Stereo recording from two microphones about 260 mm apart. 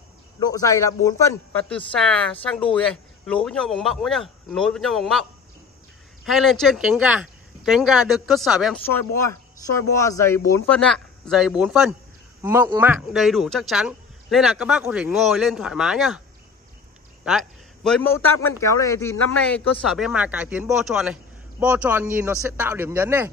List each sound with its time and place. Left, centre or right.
0.4 s a man's voice: centre
6.2 s a man's voice: centre
8.9 s a man's voice: centre
17.2 s a man's voice: centre